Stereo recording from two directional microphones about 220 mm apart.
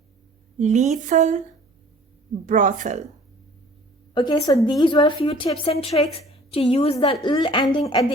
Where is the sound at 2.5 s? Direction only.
35° right (ahead or behind).